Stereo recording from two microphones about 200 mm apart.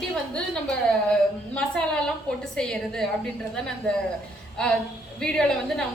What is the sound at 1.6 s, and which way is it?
A woman's voice, 5° left (ahead or behind).